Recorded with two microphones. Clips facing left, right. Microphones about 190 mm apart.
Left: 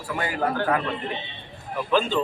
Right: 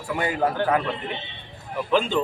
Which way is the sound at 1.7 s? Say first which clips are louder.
Right 1 dB; 15° right (ahead or behind).